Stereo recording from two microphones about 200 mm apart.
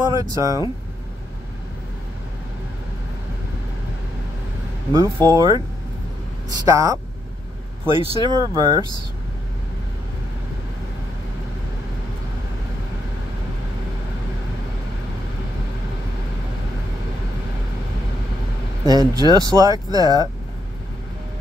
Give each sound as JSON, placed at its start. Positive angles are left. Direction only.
{"t": 0.0, "sound": "speech", "side_deg": -15}
{"t": 4.9, "sound": "speech", "side_deg": -15}
{"t": 6.6, "sound": "speech", "side_deg": -15}
{"t": 18.9, "sound": "speech", "side_deg": -20}